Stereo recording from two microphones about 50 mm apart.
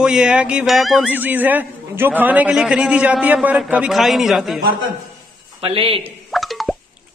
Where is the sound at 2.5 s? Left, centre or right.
Centre.